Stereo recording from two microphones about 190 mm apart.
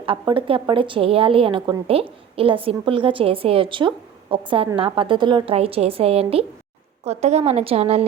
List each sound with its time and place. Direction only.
0.0 s a woman's voice: 25° right (ahead or behind)